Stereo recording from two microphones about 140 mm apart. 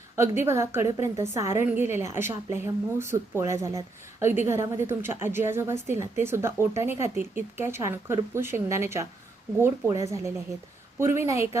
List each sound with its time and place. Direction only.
0.2 s a woman's voice: 20° right (ahead or behind)